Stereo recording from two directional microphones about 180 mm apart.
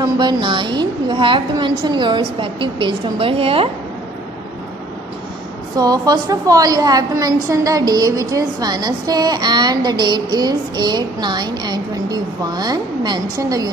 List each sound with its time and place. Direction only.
0.0 s speech: 25° right (ahead or behind)
5.8 s speech: 20° right (ahead or behind)